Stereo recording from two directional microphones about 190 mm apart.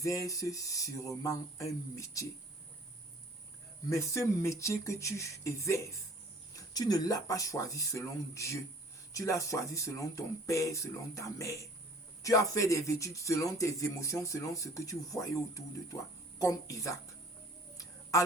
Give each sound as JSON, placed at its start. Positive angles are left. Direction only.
{"t": 0.0, "sound": "speech", "side_deg": 15}
{"t": 3.8, "sound": "speech", "side_deg": 15}